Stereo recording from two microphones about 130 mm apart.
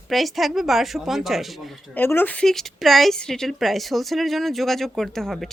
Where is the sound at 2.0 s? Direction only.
15° left (ahead or behind).